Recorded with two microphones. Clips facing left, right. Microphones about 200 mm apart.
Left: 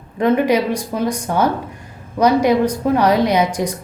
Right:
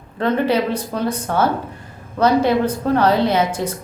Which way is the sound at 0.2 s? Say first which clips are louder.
Left 3 dB; 15° left (ahead or behind).